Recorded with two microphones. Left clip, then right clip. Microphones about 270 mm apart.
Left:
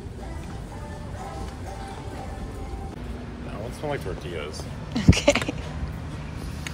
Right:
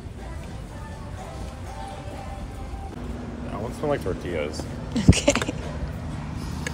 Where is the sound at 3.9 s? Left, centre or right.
Right.